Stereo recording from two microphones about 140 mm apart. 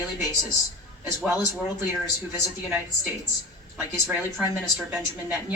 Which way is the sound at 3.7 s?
15° right (ahead or behind).